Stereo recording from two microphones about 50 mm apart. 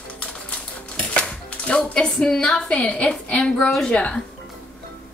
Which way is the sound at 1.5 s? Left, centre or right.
Left.